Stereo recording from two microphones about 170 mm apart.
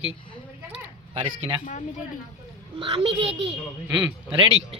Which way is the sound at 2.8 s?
30° right (ahead or behind).